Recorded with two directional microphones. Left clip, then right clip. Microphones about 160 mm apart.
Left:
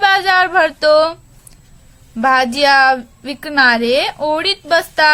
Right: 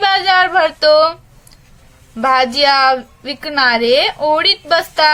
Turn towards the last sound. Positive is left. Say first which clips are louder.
# even
turn(degrees=25)  # may be behind; listen again after turning